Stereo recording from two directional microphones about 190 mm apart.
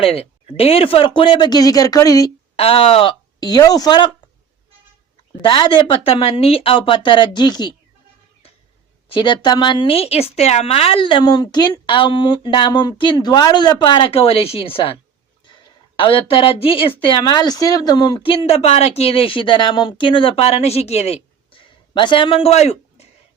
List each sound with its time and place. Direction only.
0.0 s speech: 30° left (ahead or behind)
2.6 s speech: 30° left (ahead or behind)
5.4 s speech: 25° left (ahead or behind)
9.0 s speech: 25° left (ahead or behind)
21.5 s a sound: 25° left (ahead or behind)